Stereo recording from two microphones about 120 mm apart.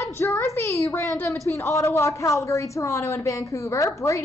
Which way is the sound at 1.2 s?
25° left (ahead or behind).